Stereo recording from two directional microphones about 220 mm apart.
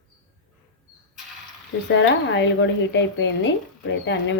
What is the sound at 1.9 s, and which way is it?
A woman's voice, 55° left (ahead or behind).